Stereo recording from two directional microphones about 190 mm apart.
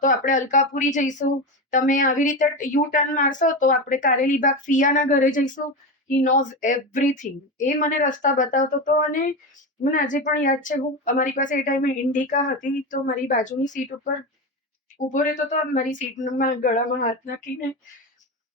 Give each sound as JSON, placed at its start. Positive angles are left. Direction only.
{"t": 0.0, "sound": "a woman's voice", "side_deg": 40}